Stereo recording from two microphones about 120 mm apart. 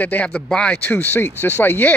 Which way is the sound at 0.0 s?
15° left (ahead or behind).